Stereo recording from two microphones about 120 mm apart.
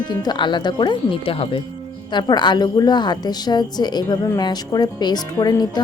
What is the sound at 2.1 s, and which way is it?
A woman's voice, 40° left (ahead or behind).